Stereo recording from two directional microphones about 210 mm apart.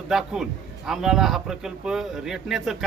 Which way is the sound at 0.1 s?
Centre (ahead or behind).